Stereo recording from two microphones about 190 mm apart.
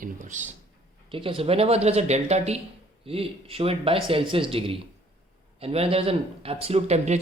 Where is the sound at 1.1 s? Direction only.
25° right (ahead or behind).